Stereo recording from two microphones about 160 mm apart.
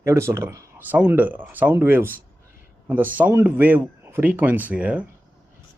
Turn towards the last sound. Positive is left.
turn(degrees=-10)  # may be behind; listen again after turning